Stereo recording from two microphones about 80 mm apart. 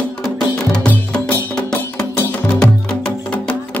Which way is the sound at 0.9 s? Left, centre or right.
Centre.